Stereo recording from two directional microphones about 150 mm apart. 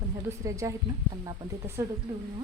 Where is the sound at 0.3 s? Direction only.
20° right (ahead or behind).